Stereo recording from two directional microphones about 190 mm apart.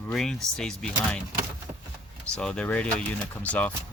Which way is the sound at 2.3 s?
5° left (ahead or behind).